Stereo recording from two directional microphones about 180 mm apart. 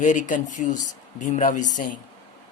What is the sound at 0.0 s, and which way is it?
Speech, 45° left (ahead or behind).